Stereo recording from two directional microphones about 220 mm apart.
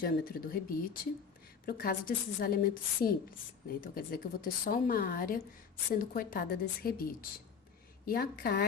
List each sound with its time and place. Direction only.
0.0 s a woman's voice: 40° left (ahead or behind)